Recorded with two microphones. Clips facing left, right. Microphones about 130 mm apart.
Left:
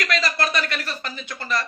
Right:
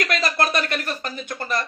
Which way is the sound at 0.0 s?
50° right (ahead or behind).